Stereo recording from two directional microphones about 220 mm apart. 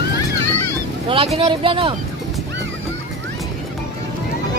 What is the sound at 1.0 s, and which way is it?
Speech, 25° right (ahead or behind).